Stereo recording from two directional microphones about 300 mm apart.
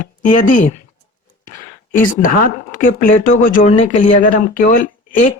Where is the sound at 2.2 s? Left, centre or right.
Left.